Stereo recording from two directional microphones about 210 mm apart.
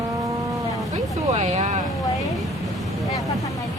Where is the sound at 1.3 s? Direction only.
35° right (ahead or behind).